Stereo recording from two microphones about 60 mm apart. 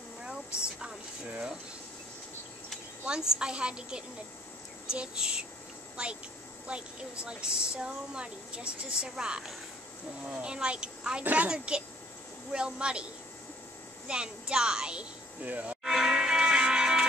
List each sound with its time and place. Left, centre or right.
0.2 s a sound: centre
3.1 s speech: centre
14.0 s speech: centre
15.4 s speech: right
15.8 s music: centre